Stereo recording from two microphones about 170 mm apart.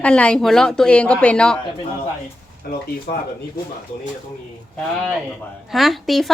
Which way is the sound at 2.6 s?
65° left (ahead or behind).